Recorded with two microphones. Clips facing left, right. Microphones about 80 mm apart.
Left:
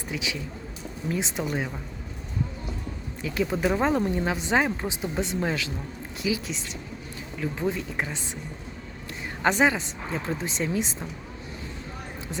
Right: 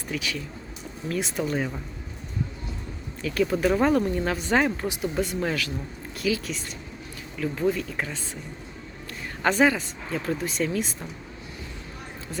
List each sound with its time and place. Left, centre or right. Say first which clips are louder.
0.1 s speech: right 1 dB; centre
3.2 s speech: right 3 dB; centre
9.4 s speech: right 1 dB; left